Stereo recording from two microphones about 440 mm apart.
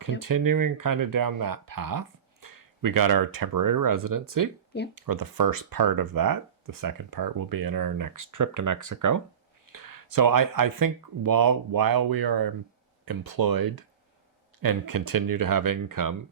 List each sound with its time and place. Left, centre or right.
0.2 s speech: right